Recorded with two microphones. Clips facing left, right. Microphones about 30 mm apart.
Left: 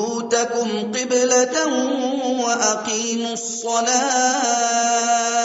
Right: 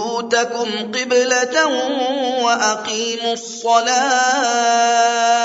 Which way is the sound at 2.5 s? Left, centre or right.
Right.